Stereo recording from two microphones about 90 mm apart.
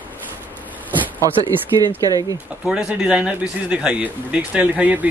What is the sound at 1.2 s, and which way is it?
Speech, 40° right (ahead or behind).